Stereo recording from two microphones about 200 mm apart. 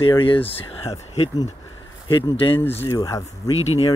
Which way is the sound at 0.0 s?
25° left (ahead or behind).